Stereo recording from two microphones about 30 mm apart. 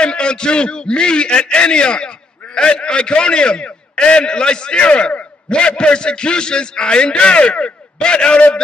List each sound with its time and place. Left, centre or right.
0.0 s a man's voice: left